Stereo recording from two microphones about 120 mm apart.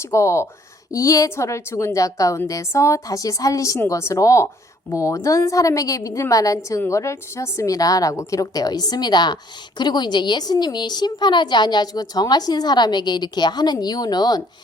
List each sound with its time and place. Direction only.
0.0 s a woman's voice: 25° left (ahead or behind)